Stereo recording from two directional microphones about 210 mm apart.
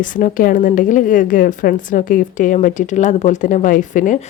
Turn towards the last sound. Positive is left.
turn(degrees=40)  # may be behind; listen again after turning